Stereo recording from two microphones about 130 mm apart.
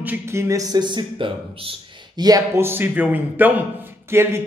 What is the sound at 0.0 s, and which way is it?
Speech, 15° right (ahead or behind).